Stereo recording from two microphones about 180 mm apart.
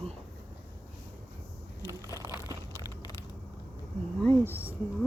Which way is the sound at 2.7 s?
15° left (ahead or behind).